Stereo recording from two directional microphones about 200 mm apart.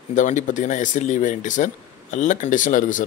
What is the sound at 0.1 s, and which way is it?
Speech, 35° left (ahead or behind).